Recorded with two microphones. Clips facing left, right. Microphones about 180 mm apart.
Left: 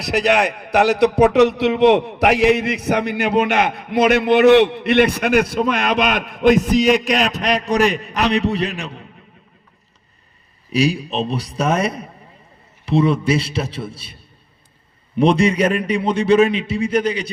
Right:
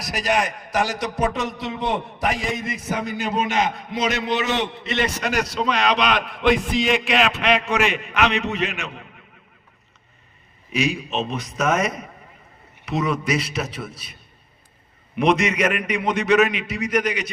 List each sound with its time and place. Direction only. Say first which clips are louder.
0.0 s a man's voice: left 6 dB; 65° left (ahead or behind); by 9.0 s 35° left (ahead or behind)
10.7 s a man's voice: left 5 dB; 35° left (ahead or behind)